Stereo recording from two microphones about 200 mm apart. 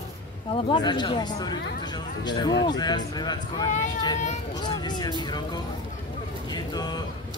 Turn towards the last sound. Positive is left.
turn(degrees=20)  # may be behind; listen again after turning